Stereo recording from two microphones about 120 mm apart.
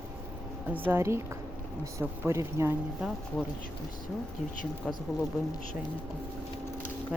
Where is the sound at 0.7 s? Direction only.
20° right (ahead or behind).